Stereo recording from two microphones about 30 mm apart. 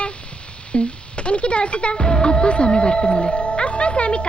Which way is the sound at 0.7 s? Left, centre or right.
Left.